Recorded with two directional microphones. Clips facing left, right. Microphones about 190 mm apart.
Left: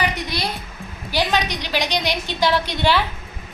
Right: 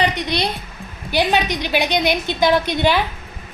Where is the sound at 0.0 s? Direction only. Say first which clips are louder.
Right 4 dB; 25° right (ahead or behind).